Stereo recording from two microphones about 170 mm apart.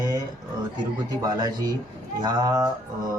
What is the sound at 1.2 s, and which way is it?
Speech, 20° right (ahead or behind).